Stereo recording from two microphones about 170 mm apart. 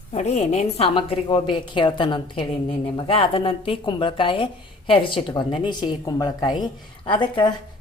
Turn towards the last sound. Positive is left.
turn(degrees=30)  # may be behind; listen again after turning